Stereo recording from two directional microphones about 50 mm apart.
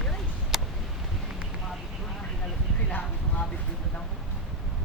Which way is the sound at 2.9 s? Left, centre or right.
Left.